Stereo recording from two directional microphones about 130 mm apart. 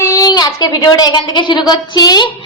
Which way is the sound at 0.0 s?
25° left (ahead or behind).